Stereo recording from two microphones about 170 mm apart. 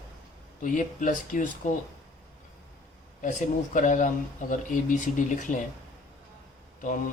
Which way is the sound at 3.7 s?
50° left (ahead or behind).